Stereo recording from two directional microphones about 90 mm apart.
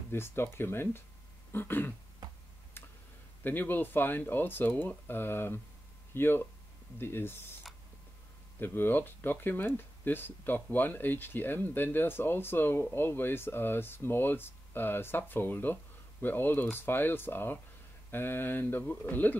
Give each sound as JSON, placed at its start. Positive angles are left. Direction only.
{"t": 0.1, "sound": "speech", "side_deg": 25}
{"t": 2.2, "sound": "finger snapping", "side_deg": -50}
{"t": 3.4, "sound": "speech", "side_deg": 20}
{"t": 8.5, "sound": "speech", "side_deg": 25}